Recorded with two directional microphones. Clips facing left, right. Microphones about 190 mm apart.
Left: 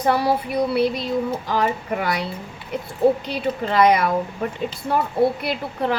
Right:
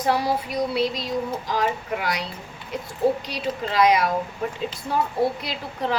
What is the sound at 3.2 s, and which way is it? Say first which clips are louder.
Speech: left 4 dB; 55° left (ahead or behind).